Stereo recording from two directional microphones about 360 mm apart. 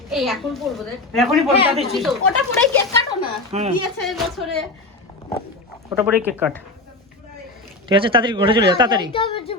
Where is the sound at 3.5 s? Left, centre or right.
Centre.